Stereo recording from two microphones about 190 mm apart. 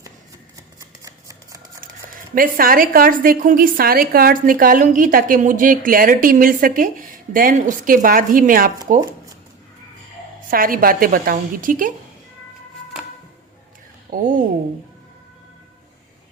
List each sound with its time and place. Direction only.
1.0 s a sound: 20° right (ahead or behind)
2.3 s a woman's voice: 50° right (ahead or behind)
10.5 s a woman's voice: 50° right (ahead or behind)
14.1 s a woman's voice: 45° right (ahead or behind)